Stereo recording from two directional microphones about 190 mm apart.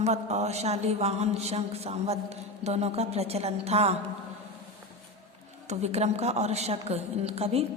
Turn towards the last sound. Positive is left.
turn(degrees=-30)  # may be behind; listen again after turning